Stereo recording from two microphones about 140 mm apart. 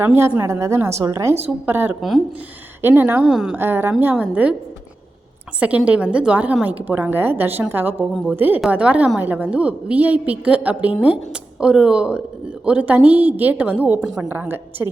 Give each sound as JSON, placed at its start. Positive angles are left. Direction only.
{"t": 0.0, "sound": "a woman's voice", "side_deg": -15}
{"t": 2.0, "sound": "speech", "side_deg": 0}
{"t": 2.8, "sound": "a woman's voice", "side_deg": -10}
{"t": 3.6, "sound": "a woman's voice", "side_deg": -15}
{"t": 5.5, "sound": "a woman's voice", "side_deg": -10}